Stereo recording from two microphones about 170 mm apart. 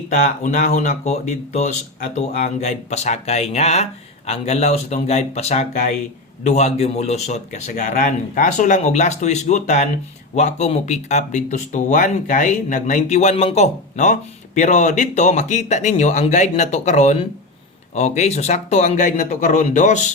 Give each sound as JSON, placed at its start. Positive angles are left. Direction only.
{"t": 0.1, "sound": "speech", "side_deg": 45}